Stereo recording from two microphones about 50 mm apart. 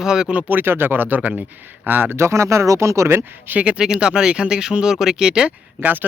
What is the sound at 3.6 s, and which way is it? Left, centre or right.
Speech, centre.